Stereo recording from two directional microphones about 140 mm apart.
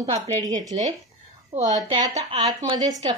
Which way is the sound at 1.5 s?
55° right (ahead or behind).